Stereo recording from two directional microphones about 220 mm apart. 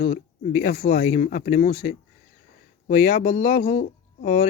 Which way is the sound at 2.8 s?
35° left (ahead or behind).